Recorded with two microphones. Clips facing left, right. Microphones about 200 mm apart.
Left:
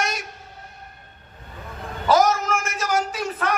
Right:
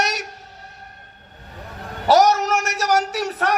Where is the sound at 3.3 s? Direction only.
40° right (ahead or behind).